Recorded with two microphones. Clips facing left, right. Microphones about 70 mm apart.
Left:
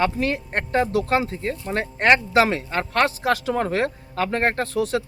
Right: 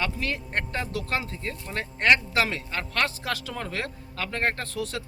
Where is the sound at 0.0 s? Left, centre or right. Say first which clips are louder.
Left 8 dB; left.